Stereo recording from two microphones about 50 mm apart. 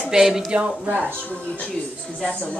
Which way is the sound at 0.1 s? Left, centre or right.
Centre.